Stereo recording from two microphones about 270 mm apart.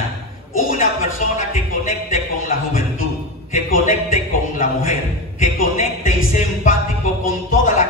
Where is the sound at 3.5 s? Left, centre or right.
Left.